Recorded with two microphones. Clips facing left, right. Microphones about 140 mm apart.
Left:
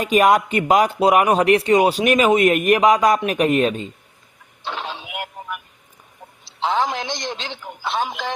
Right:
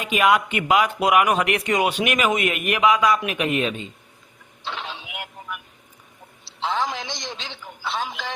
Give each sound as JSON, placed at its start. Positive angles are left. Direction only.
{"t": 0.0, "sound": "speech", "side_deg": 40}
{"t": 4.6, "sound": "radio", "side_deg": 40}
{"t": 6.4, "sound": "a man's voice", "side_deg": 50}